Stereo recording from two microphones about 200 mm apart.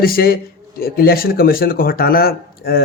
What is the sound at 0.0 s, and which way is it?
Speech, 50° left (ahead or behind).